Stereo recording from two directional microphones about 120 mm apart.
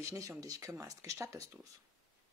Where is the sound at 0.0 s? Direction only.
25° right (ahead or behind).